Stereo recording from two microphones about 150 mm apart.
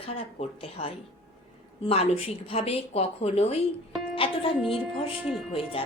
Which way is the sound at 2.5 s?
40° left (ahead or behind).